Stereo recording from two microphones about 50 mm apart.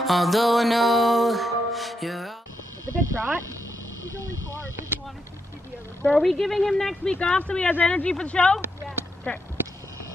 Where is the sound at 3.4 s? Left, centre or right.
Right.